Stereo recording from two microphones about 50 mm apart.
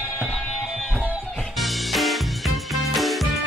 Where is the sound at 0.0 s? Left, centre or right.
Left.